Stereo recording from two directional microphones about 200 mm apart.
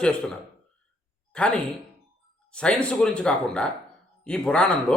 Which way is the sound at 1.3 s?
5° left (ahead or behind).